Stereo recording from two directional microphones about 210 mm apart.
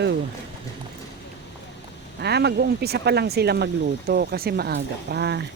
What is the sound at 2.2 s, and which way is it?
Speech, 50° right (ahead or behind).